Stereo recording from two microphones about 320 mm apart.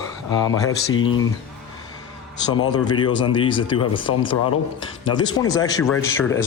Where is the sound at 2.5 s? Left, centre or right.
Centre.